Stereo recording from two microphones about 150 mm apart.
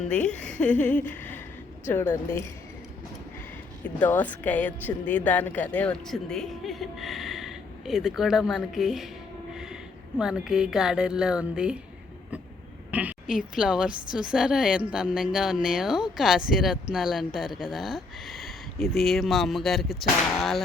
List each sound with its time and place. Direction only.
0.1 s speech: 10° left (ahead or behind)
3.8 s a woman's voice: 10° left (ahead or behind)
10.2 s a woman's voice: 5° right (ahead or behind)
12.9 s a woman's voice: 10° right (ahead or behind)